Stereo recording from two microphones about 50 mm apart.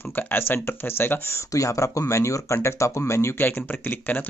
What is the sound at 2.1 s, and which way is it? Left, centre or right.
Speech, left.